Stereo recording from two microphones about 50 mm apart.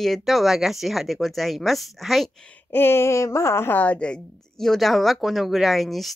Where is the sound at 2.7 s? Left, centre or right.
Left.